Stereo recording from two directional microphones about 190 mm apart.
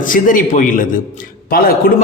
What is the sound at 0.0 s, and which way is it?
A man's voice, 45° left (ahead or behind).